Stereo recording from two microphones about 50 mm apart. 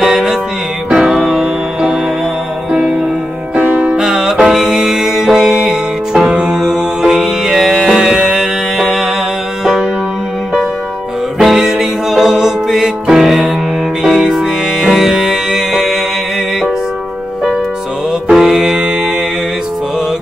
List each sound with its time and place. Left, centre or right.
0.0 s music: centre
3.5 s music: right
4.0 s music: centre
11.3 s music: centre
18.3 s music: centre